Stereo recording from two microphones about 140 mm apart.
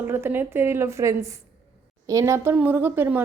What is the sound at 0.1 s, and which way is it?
Speech, 15° right (ahead or behind).